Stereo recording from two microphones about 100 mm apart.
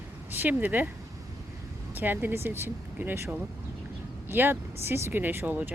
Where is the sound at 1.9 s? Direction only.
20° right (ahead or behind).